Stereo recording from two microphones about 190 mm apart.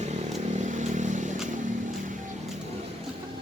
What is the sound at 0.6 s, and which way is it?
Vehicle, 40° right (ahead or behind).